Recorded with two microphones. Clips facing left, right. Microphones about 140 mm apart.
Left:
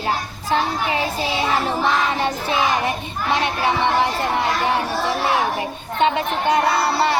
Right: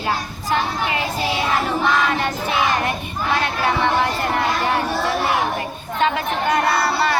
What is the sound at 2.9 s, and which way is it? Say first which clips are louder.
Speech: even; 20° left (ahead or behind).